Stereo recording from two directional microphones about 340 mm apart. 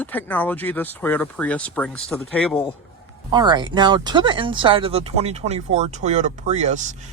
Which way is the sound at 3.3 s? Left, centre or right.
Centre.